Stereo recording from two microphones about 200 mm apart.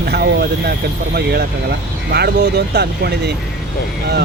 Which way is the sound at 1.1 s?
55° right (ahead or behind).